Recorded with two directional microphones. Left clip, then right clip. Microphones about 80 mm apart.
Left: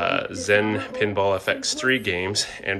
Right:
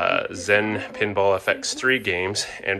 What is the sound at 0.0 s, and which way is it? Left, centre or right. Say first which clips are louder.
Speech: right 1 dB; left.